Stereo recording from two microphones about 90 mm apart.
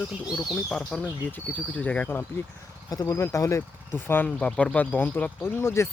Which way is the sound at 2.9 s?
45° left (ahead or behind).